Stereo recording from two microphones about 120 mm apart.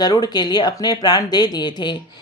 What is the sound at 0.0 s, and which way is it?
Speech, 35° left (ahead or behind).